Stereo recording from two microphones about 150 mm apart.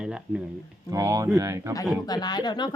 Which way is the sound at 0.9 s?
20° right (ahead or behind).